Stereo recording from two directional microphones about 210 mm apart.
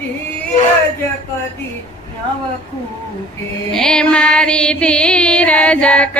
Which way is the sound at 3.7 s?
5° left (ahead or behind).